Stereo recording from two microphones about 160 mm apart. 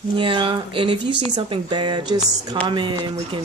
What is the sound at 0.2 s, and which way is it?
Speech, 30° right (ahead or behind).